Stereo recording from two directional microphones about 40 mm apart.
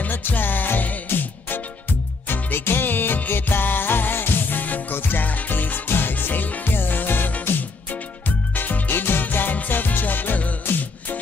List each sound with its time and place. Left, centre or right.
0.1 s music: left
8.5 s music: left
8.9 s music: left
9.2 s music: left